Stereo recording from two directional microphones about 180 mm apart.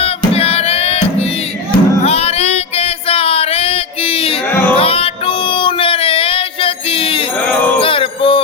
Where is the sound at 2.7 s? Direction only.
35° left (ahead or behind).